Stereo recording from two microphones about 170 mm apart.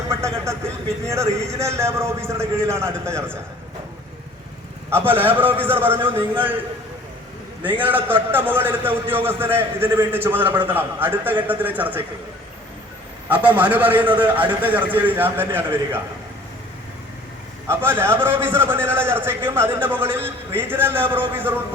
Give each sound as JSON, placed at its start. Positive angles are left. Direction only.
{"t": 0.1, "sound": "a man's voice", "side_deg": -15}
{"t": 4.9, "sound": "a man's voice", "side_deg": -10}
{"t": 7.8, "sound": "a man's voice", "side_deg": -10}
{"t": 13.2, "sound": "a man's voice", "side_deg": -10}
{"t": 17.7, "sound": "a man's voice", "side_deg": -15}